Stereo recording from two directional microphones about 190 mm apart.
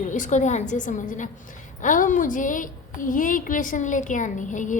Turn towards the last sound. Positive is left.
turn(degrees=40)  # may be behind; listen again after turning